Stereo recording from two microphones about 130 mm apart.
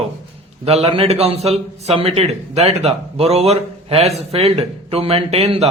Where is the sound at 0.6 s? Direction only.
50° right (ahead or behind).